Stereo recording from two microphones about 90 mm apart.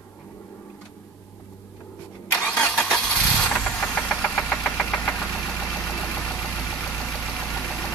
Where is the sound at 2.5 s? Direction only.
15° left (ahead or behind).